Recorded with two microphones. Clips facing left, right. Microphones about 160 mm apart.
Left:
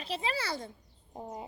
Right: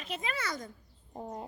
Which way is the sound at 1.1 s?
Centre (ahead or behind).